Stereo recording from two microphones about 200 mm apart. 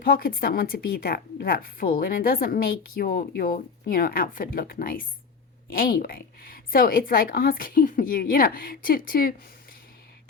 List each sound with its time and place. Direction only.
0.0 s speech: 45° left (ahead or behind)